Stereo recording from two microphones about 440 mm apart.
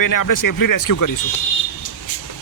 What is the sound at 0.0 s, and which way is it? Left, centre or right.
Speech, left.